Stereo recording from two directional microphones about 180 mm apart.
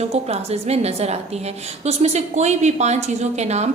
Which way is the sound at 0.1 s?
35° right (ahead or behind).